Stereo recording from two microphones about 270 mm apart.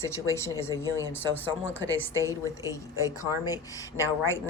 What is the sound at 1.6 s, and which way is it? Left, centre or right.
Speech, left.